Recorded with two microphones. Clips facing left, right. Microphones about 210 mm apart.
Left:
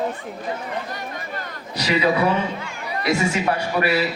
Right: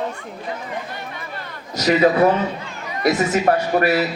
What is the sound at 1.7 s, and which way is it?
A man's voice, 45° right (ahead or behind).